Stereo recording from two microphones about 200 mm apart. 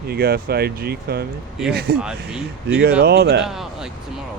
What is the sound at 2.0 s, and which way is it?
Speech, 5° right (ahead or behind).